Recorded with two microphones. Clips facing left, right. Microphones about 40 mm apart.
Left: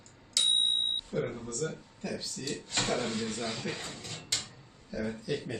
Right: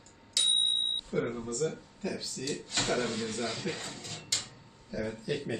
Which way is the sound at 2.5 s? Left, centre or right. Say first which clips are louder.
Even; centre.